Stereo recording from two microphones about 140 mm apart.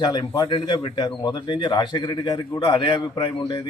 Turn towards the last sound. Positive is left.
turn(degrees=35)  # may be behind; listen again after turning